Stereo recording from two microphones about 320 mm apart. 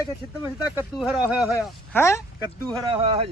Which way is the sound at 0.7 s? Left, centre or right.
Centre.